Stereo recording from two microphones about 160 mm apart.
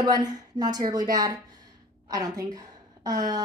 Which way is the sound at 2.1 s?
25° right (ahead or behind).